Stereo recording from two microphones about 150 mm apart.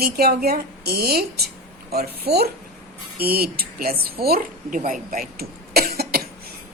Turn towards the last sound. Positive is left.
turn(degrees=-90)